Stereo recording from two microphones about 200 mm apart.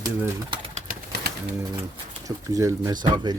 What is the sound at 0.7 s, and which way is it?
Pigeon, 35° right (ahead or behind).